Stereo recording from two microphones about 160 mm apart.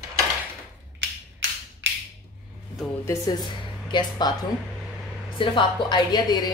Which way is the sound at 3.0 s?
20° left (ahead or behind).